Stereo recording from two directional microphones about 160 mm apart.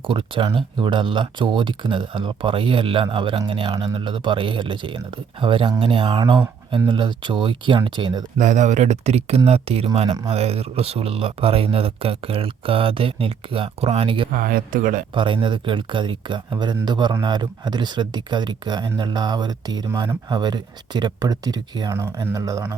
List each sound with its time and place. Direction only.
0.1 s speech: 35° right (ahead or behind)
8.4 s speech: 50° right (ahead or behind); by 14.3 s 35° right (ahead or behind)
14.3 s speech: 60° right (ahead or behind)
15.1 s speech: 30° right (ahead or behind)